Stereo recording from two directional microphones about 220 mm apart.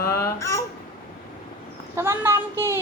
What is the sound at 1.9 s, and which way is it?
Speech, 10° right (ahead or behind).